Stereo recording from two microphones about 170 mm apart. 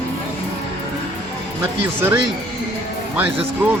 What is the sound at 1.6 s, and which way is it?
Speech, 10° right (ahead or behind).